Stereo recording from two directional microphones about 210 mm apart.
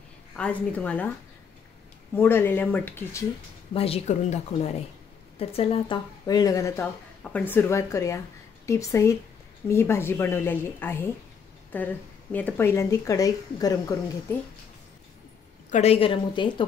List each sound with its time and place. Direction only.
0.4 s speech: 5° left (ahead or behind)
2.1 s speech: 10° left (ahead or behind)
3.7 s speech: 25° left (ahead or behind)
15.7 s speech: 30° left (ahead or behind)